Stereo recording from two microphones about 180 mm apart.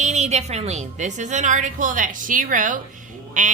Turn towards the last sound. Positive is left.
turn(degrees=-45)  # may be behind; listen again after turning